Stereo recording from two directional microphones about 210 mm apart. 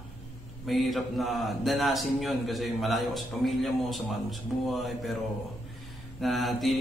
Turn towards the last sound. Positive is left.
turn(degrees=0)  # may be behind; listen again after turning